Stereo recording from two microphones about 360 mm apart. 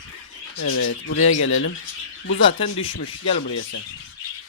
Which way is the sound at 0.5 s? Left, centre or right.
Left.